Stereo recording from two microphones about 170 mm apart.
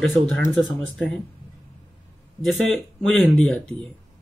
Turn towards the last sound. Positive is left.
turn(degrees=0)  # may be behind; listen again after turning